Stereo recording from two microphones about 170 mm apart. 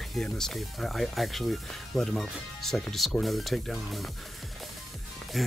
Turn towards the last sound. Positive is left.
turn(degrees=0)  # may be behind; listen again after turning